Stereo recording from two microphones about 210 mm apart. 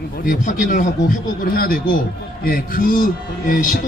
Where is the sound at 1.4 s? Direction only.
45° left (ahead or behind).